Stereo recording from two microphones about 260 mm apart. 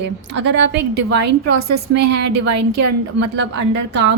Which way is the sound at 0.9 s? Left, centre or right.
Right.